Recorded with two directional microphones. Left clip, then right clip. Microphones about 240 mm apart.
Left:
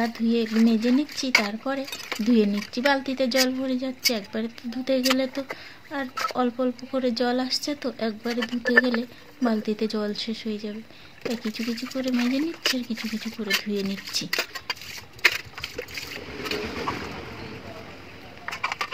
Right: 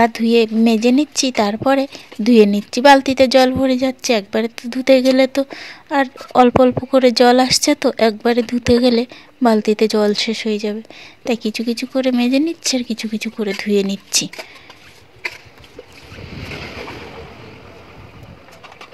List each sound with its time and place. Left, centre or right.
0.0 s speech: right